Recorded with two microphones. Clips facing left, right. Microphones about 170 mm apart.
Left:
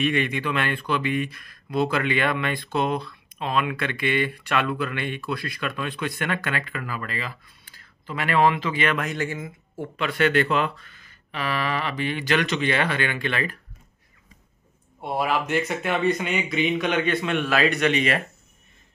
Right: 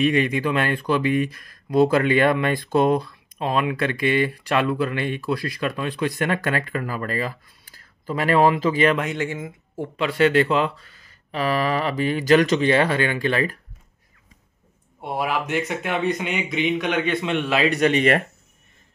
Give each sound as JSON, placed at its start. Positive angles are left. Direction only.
{"t": 0.0, "sound": "speech", "side_deg": -35}
{"t": 15.0, "sound": "a man's voice", "side_deg": -10}
{"t": 17.6, "sound": "speech", "side_deg": -35}